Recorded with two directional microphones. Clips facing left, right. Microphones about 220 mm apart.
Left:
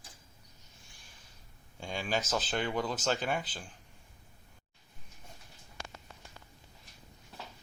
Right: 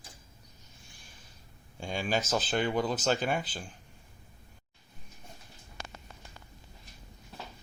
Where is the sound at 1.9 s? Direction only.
10° right (ahead or behind).